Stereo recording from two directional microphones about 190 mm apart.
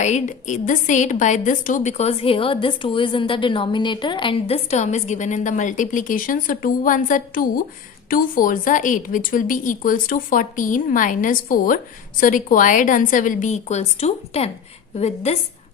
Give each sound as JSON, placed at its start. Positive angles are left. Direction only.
{"t": 0.0, "sound": "a woman's voice", "side_deg": 40}